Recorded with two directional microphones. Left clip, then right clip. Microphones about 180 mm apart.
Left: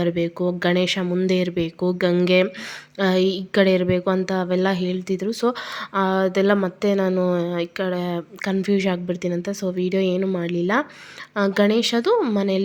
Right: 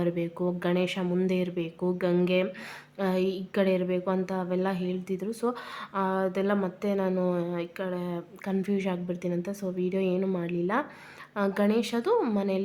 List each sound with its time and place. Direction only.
0.0 s a woman's voice: 20° left (ahead or behind)